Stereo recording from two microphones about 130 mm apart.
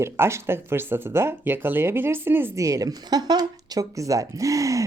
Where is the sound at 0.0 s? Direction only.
20° right (ahead or behind).